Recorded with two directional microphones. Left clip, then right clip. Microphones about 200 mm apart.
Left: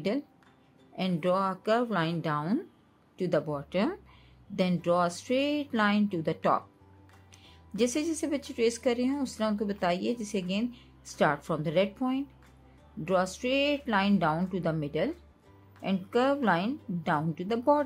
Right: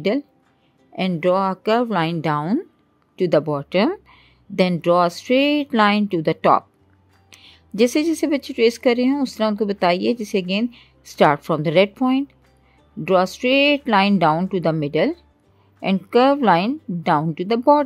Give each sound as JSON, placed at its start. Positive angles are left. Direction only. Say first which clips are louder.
{"t": 0.9, "sound": "speech", "louder": "right 10 dB", "side_deg": -45}